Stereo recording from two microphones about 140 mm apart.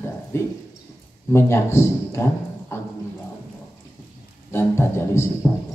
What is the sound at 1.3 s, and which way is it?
Speech, 20° left (ahead or behind).